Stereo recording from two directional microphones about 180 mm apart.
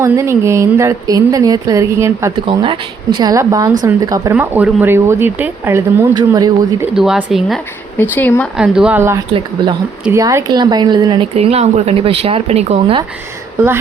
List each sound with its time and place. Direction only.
0.0 s speech: 15° right (ahead or behind)
2.5 s speech: 25° right (ahead or behind)
6.9 s speech: 5° right (ahead or behind)
8.1 s speech: 10° left (ahead or behind)
8.5 s speech: 5° right (ahead or behind); by 13.0 s 35° right (ahead or behind)